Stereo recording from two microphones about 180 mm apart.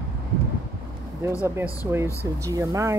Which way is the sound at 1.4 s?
15° right (ahead or behind).